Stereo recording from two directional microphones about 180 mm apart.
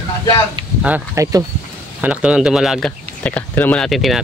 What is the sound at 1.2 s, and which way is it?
Speech, 15° right (ahead or behind).